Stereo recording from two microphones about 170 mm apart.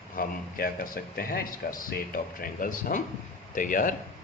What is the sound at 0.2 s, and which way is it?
A man's voice, 60° left (ahead or behind).